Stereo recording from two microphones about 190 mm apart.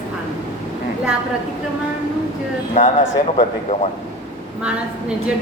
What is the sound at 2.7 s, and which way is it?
Speech, 40° left (ahead or behind).